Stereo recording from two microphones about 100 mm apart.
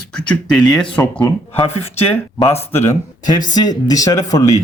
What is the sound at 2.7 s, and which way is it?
Speech, 25° left (ahead or behind).